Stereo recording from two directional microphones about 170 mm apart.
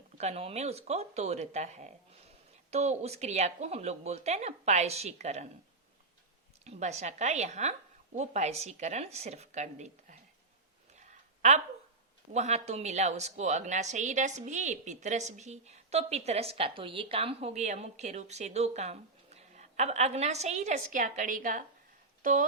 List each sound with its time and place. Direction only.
0.2 s a woman's voice: 40° right (ahead or behind)
6.7 s a woman's voice: 40° right (ahead or behind)
11.0 s a sound: 45° right (ahead or behind)
12.3 s a woman's voice: 40° right (ahead or behind)